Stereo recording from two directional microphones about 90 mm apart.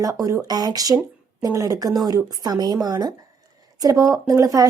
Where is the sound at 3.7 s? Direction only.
40° right (ahead or behind).